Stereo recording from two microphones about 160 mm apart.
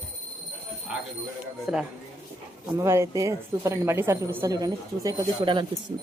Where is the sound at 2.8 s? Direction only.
20° right (ahead or behind).